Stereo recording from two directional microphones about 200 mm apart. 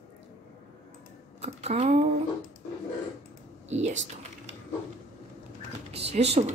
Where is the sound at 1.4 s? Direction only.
30° right (ahead or behind).